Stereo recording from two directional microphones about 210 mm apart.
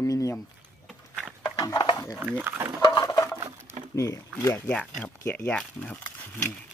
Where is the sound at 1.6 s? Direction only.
20° left (ahead or behind).